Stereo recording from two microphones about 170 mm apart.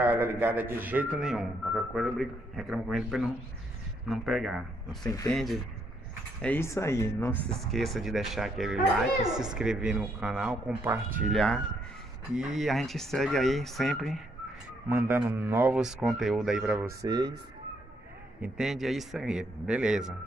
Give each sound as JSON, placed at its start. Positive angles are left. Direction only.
{"t": 0.0, "sound": "speech", "side_deg": -15}
{"t": 6.4, "sound": "speech", "side_deg": 15}
{"t": 7.5, "sound": "speech", "side_deg": 0}
{"t": 9.2, "sound": "speech", "side_deg": -25}
{"t": 9.5, "sound": "speech", "side_deg": -5}
{"t": 14.9, "sound": "a man's voice", "side_deg": -15}
{"t": 17.0, "sound": "speech", "side_deg": -25}
{"t": 18.4, "sound": "speech", "side_deg": -5}